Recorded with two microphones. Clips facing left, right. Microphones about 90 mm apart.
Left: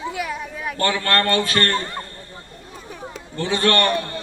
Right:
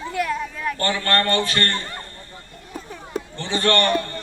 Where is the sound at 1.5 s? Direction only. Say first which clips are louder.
Left 3 dB; 50° left (ahead or behind).